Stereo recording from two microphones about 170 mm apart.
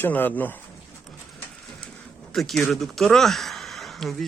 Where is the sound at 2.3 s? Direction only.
Centre (ahead or behind).